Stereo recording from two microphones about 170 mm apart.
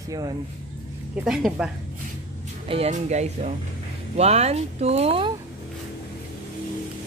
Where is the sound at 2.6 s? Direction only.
35° right (ahead or behind).